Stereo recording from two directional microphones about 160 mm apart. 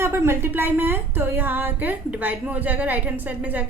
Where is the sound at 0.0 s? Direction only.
15° right (ahead or behind).